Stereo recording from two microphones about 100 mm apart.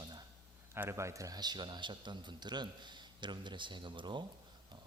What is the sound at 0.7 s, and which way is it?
A man's voice, 25° right (ahead or behind).